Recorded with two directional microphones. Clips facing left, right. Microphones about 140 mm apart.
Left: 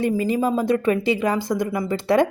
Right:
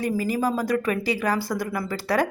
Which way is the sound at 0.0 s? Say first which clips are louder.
Left 3 dB; 25° left (ahead or behind).